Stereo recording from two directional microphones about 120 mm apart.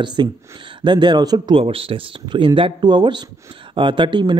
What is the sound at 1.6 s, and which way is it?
Speech, 50° right (ahead or behind).